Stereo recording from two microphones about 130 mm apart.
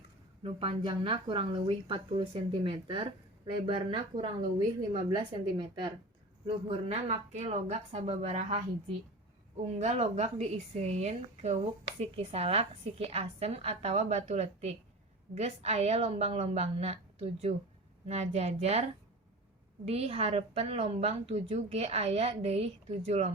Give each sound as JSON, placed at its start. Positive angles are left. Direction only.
{"t": 0.4, "sound": "a woman's voice", "side_deg": -45}
{"t": 6.5, "sound": "a woman's voice", "side_deg": -50}
{"t": 9.7, "sound": "a woman's voice", "side_deg": -55}